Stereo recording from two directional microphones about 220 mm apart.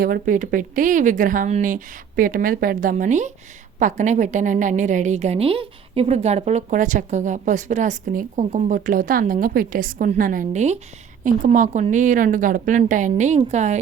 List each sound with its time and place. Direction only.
0.0 s a woman's voice: 40° right (ahead or behind)